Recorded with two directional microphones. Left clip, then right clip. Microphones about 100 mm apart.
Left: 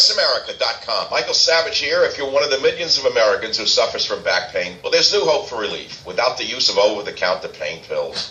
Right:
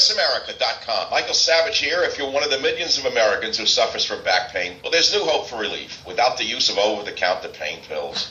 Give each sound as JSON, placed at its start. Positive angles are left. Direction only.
{"t": 0.2, "sound": "a man's voice", "side_deg": 35}